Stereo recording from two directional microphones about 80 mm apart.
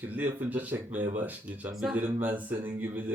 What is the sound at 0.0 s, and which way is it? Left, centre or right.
Speech, right.